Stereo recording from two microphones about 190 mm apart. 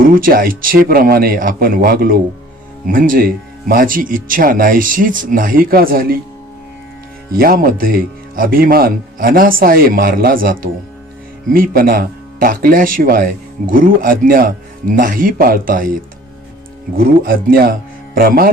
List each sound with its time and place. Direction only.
0.0 s speech: 45° right (ahead or behind)
7.3 s speech: 50° right (ahead or behind)
17.0 s speech: 50° right (ahead or behind)